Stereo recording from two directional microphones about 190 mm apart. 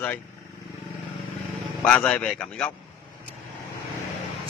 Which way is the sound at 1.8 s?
10° left (ahead or behind).